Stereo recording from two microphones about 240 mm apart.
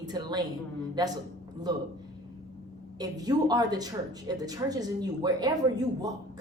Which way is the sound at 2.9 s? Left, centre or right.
Centre.